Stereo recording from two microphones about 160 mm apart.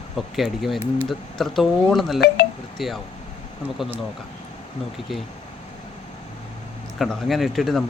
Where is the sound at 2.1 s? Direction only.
90° left.